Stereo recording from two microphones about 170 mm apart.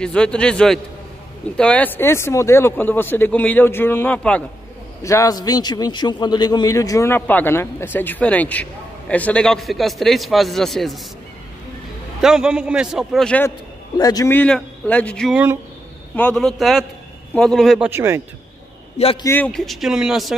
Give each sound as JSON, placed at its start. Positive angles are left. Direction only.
{"t": 0.0, "sound": "a man's voice", "side_deg": 5}
{"t": 5.0, "sound": "a man's voice", "side_deg": 20}
{"t": 12.2, "sound": "a man's voice", "side_deg": -5}
{"t": 13.9, "sound": "a man's voice", "side_deg": 20}
{"t": 17.8, "sound": "a man's voice", "side_deg": -15}
{"t": 19.2, "sound": "speech", "side_deg": 10}
{"t": 19.5, "sound": "a man's voice", "side_deg": 0}